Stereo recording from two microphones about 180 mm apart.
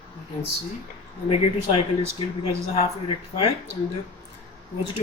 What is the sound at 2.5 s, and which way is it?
Speech, 30° left (ahead or behind).